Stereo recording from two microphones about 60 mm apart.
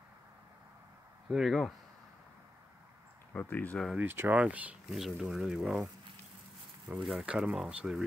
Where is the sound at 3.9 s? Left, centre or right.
Right.